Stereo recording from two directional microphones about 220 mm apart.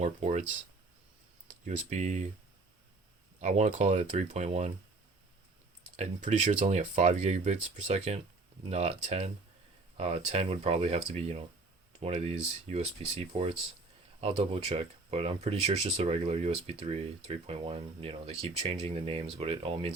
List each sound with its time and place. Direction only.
0.0 s speech: 30° right (ahead or behind)
1.5 s speech: 35° right (ahead or behind)
3.4 s speech: 30° right (ahead or behind)
6.0 s speech: 35° right (ahead or behind)